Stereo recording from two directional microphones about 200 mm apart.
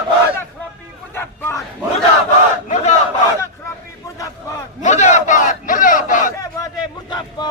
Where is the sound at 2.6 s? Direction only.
35° left (ahead or behind).